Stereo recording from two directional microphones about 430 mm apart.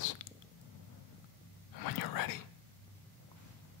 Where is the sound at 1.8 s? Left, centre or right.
Left.